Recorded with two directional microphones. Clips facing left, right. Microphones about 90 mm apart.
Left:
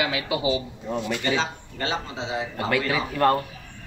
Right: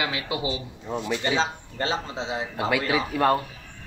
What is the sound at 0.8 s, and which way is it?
Speech, 5° right (ahead or behind).